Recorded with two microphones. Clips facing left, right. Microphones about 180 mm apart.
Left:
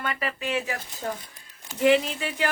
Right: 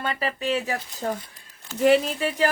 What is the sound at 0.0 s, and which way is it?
Speech, 30° right (ahead or behind).